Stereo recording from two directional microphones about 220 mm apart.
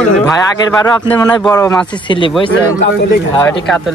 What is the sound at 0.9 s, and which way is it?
Speech, 20° left (ahead or behind).